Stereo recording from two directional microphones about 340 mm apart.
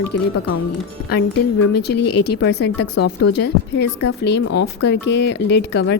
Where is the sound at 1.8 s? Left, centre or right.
Left.